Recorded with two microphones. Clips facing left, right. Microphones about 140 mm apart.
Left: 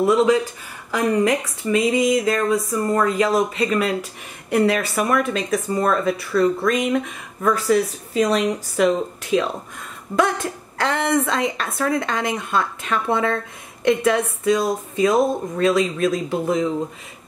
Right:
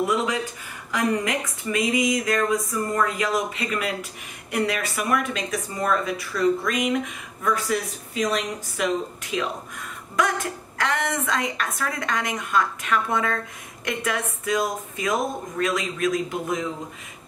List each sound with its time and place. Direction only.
0.0 s speech: 30° left (ahead or behind)
8.1 s speech: 35° left (ahead or behind)
10.1 s speech: 55° left (ahead or behind)
10.8 s speech: 30° left (ahead or behind)